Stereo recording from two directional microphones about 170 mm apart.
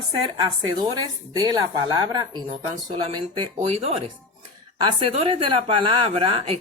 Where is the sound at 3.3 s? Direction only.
35° right (ahead or behind).